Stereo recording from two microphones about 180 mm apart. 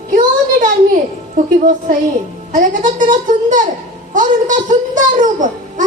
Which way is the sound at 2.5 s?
45° right (ahead or behind).